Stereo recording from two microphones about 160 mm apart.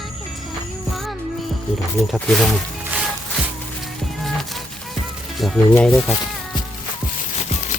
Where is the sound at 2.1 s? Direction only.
Centre (ahead or behind).